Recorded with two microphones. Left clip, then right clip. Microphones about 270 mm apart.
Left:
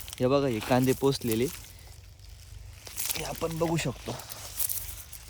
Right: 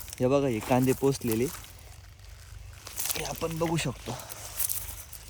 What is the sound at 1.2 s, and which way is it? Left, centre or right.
Speech, centre.